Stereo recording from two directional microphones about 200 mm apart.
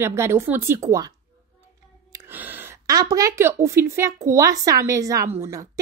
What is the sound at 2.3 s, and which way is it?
A woman's voice, 10° right (ahead or behind).